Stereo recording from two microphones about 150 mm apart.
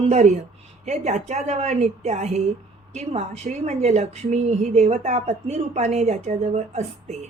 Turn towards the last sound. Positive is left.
turn(degrees=-50)  # may be behind; listen again after turning